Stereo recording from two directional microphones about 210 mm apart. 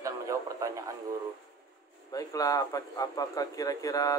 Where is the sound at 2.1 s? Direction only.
15° left (ahead or behind).